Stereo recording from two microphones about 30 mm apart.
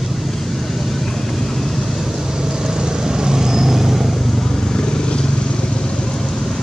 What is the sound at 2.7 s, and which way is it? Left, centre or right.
Vehicle, right.